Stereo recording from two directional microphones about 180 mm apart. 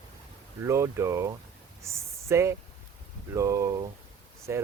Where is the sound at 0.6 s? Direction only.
15° right (ahead or behind).